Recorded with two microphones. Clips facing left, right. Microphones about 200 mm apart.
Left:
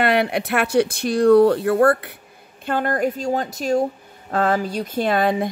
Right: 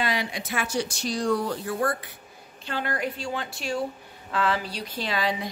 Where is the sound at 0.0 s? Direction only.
60° left (ahead or behind).